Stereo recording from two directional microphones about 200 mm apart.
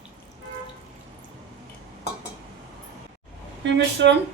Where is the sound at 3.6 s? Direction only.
60° right (ahead or behind).